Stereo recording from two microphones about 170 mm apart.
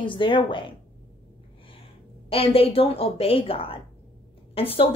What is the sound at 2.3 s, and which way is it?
A woman's voice, 35° left (ahead or behind).